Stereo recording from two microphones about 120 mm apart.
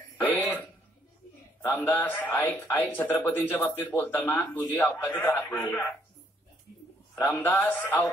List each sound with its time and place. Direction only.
0.2 s throat clearing: 15° left (ahead or behind)
1.9 s a man's voice: 15° left (ahead or behind)
7.2 s a man's voice: 20° left (ahead or behind)